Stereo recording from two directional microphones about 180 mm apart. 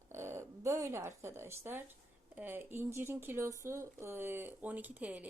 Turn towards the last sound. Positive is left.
turn(degrees=-10)  # may be behind; listen again after turning